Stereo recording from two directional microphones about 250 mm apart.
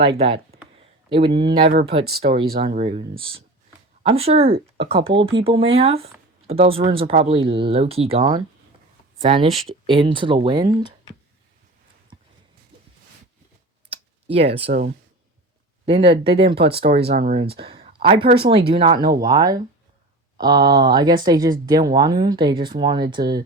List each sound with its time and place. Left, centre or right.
0.0 s speech: right
13.9 s a sound: right
14.7 s speech: right
15.9 s speech: right